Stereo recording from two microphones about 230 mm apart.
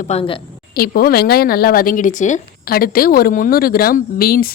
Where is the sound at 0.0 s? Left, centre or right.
Left.